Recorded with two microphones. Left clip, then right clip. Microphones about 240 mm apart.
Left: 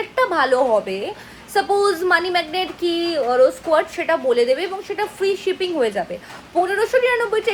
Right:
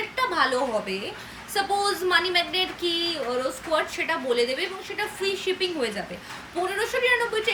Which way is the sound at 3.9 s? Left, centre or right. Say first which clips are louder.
Left 7 dB; left.